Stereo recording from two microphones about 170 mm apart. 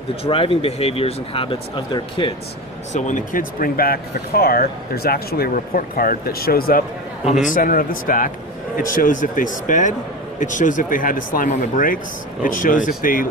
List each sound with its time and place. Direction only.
0.1 s speech: 35° left (ahead or behind)
2.9 s speech: 45° left (ahead or behind)